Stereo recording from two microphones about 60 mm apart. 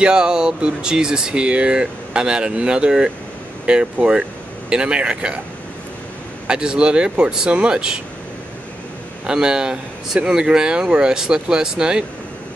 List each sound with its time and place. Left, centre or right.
0.0 s speech: centre
6.4 s speech: centre
9.2 s speech: centre